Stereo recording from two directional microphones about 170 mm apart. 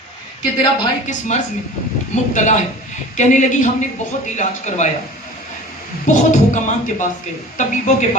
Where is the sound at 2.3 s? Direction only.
45° left (ahead or behind).